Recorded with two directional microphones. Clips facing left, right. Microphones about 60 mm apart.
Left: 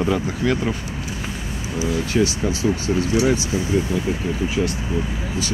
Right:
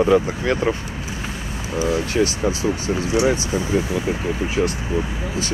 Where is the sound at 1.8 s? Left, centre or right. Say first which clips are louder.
Right 1 dB; right.